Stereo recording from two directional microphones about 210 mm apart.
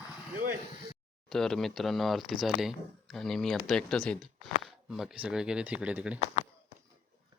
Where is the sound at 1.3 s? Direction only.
Centre (ahead or behind).